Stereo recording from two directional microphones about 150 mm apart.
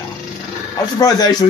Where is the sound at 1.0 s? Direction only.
25° left (ahead or behind).